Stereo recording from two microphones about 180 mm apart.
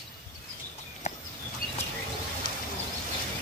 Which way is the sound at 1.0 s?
40° left (ahead or behind).